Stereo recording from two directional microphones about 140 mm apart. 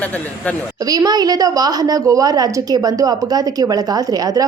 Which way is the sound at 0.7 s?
25° right (ahead or behind).